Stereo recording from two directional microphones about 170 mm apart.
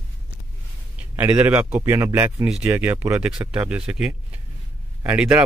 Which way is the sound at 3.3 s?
5° right (ahead or behind).